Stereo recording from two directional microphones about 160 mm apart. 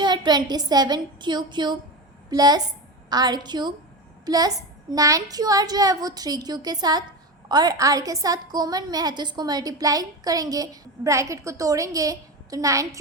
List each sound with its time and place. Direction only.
0.0 s a woman's voice: 30° right (ahead or behind)